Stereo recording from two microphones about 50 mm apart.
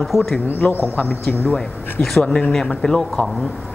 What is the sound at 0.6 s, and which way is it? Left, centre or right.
Speech, left.